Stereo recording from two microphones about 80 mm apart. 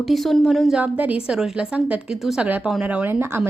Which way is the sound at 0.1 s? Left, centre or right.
Centre.